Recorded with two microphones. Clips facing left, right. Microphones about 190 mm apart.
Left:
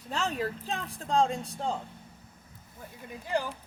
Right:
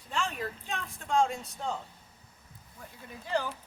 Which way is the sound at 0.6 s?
35° left (ahead or behind).